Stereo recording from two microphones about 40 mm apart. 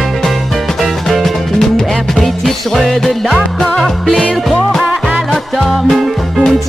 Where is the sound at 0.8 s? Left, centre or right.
Centre.